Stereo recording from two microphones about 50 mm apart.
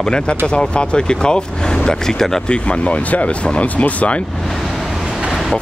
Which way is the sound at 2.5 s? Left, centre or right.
Left.